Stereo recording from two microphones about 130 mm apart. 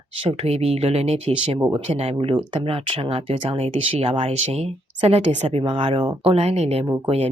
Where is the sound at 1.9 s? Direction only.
45° right (ahead or behind).